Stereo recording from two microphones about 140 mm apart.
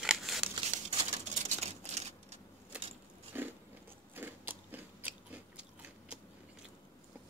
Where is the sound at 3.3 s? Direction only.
15° right (ahead or behind).